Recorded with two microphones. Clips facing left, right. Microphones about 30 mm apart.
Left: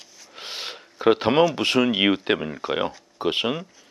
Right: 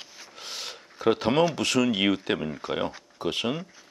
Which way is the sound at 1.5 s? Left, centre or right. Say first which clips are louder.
Left 3 dB; left.